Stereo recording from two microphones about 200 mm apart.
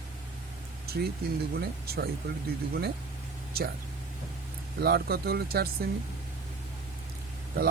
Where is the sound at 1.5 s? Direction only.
50° right (ahead or behind).